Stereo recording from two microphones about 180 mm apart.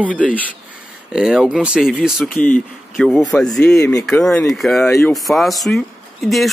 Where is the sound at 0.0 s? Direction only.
10° right (ahead or behind).